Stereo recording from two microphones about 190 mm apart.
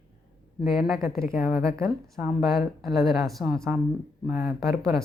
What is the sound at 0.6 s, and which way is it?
A woman's voice, 5° right (ahead or behind).